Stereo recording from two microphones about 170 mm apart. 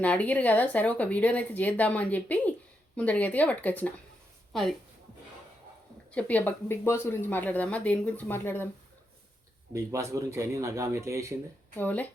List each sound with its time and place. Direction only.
0.0 s speech: 10° left (ahead or behind)
6.1 s speech: 10° left (ahead or behind)
9.7 s speech: 15° right (ahead or behind)
11.8 s speech: 10° left (ahead or behind)